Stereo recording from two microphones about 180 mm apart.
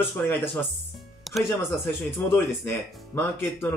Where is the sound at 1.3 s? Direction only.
Centre (ahead or behind).